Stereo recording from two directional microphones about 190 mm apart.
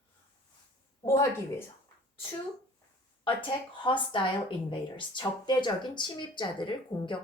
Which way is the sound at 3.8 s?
25° left (ahead or behind).